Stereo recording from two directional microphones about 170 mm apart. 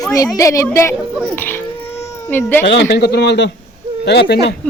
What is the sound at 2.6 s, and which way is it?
A man's voice, 90° left.